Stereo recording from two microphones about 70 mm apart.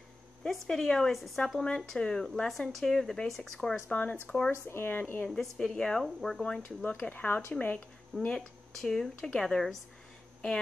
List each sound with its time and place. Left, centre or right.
0.4 s a woman's voice: centre
3.9 s speech: left
4.5 s speech: left
5.4 s speech: centre
6.4 s a woman's voice: centre
7.0 s speech: left
8.3 s speech: centre